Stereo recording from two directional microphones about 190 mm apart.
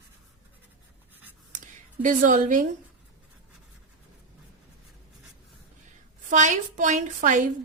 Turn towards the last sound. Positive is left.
turn(degrees=-40)  # may be behind; listen again after turning